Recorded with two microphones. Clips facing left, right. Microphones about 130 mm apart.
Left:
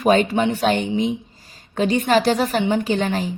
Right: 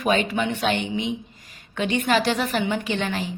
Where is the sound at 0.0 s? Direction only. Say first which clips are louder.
Left 6 dB; 40° left (ahead or behind).